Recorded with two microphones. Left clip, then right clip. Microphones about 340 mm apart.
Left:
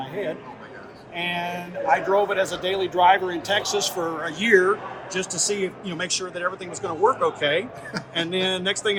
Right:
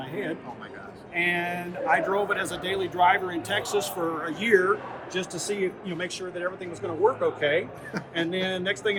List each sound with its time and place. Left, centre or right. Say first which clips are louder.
1.1 s a man's voice: right 1 dB; centre; by 9.0 s left